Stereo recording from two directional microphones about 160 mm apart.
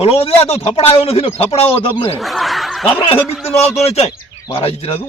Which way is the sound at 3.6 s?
40° left (ahead or behind).